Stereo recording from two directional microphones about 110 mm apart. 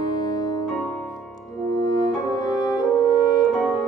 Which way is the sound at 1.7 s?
40° left (ahead or behind).